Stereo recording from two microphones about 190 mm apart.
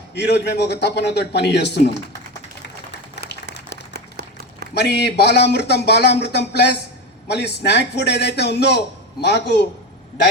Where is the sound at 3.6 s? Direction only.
60° right (ahead or behind).